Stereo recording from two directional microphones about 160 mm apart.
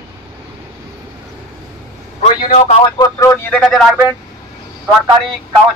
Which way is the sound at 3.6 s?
Centre (ahead or behind).